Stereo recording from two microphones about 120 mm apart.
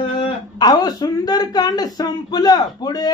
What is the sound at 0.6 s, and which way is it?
A man's voice, 35° left (ahead or behind).